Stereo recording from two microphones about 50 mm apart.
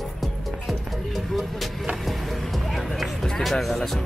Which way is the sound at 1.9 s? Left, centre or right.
Centre.